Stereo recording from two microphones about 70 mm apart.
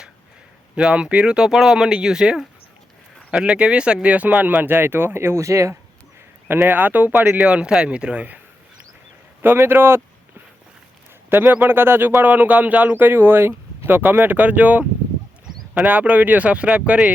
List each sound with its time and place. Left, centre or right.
0.8 s speech: centre; by 5.7 s right
6.5 s speech: right
7.4 s speech: centre
9.4 s speech: right
11.3 s speech: right
15.9 s speech: right